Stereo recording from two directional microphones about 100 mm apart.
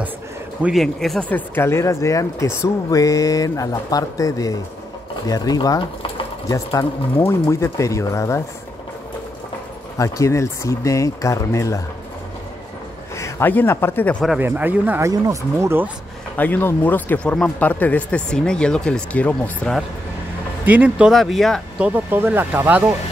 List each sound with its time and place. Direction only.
0.7 s speech: 5° left (ahead or behind)
1.3 s speech: 20° left (ahead or behind)
9.9 s speech: 30° left (ahead or behind)
13.2 s speech: 20° left (ahead or behind)
14.4 s speech: 20° right (ahead or behind)
15.0 s speech: 30° right (ahead or behind)
16.3 s speech: 20° left (ahead or behind)
20.6 s speech: 15° right (ahead or behind)
21.1 s speech: centre (ahead or behind)
21.7 s speech: 10° right (ahead or behind)